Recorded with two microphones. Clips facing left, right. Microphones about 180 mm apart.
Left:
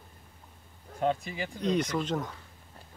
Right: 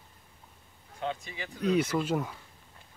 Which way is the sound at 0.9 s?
40° left (ahead or behind).